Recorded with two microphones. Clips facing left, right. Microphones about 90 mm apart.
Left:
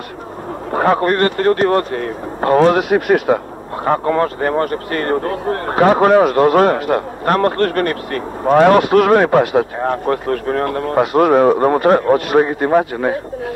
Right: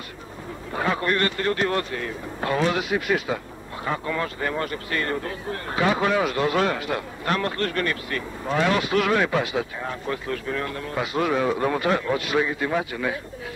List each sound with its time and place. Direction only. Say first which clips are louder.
0.7 s speech: left 10 dB; 55° left (ahead or behind)